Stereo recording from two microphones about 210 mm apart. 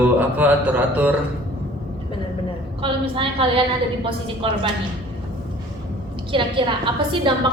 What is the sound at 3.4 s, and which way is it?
A woman's voice, 25° right (ahead or behind).